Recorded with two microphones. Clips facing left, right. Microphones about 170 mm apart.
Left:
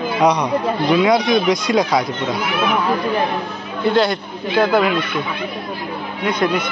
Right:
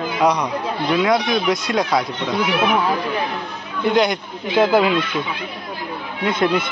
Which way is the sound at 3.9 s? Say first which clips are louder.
Even; 20° right (ahead or behind).